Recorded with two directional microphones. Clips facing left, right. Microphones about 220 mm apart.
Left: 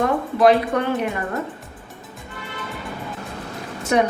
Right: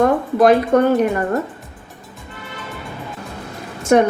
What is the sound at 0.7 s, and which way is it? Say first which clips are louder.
Speech: right 8 dB; 45° right (ahead or behind).